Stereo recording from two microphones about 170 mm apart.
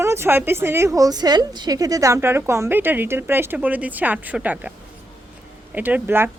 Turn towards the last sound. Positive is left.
turn(degrees=-15)  # may be behind; listen again after turning